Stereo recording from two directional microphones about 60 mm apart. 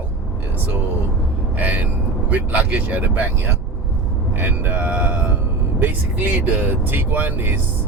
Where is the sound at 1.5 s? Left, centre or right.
Right.